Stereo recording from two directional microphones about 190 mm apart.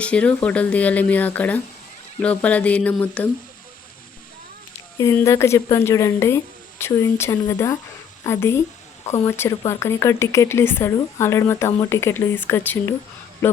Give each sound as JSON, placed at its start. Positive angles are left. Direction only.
{"t": 0.0, "sound": "speech", "side_deg": 5}
{"t": 4.9, "sound": "speech", "side_deg": 15}